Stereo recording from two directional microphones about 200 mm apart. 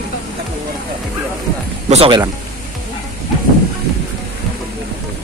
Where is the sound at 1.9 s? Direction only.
25° right (ahead or behind).